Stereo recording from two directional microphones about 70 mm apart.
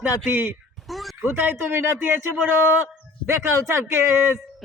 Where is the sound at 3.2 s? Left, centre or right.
Right.